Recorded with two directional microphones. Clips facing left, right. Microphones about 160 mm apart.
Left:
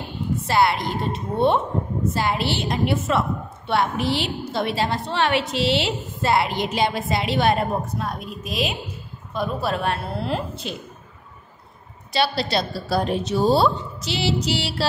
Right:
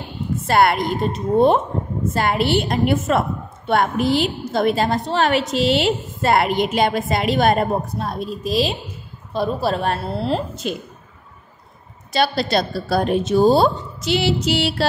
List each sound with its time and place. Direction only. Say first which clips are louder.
0.5 s a woman's voice: right 4 dB; 55° right (ahead or behind)
2.1 s a woman's voice: right 7 dB; 55° right (ahead or behind); by 10.7 s 40° right (ahead or behind)
12.1 s a woman's voice: right 3 dB; 45° right (ahead or behind)